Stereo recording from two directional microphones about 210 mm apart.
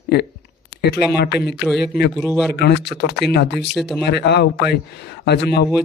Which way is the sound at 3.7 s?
Centre (ahead or behind).